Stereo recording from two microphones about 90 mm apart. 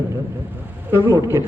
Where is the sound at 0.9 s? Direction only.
25° right (ahead or behind).